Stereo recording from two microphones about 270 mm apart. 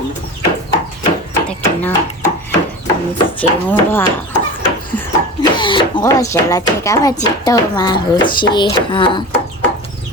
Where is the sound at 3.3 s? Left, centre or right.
Centre.